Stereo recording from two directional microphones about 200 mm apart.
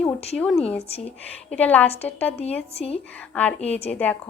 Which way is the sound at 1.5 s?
5° left (ahead or behind).